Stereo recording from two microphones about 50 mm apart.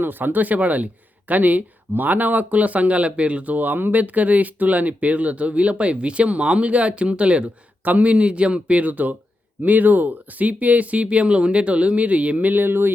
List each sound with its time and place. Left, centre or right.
0.0 s speech: right